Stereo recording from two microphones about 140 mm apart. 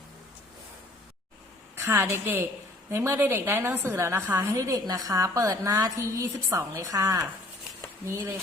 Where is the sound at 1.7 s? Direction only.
20° right (ahead or behind).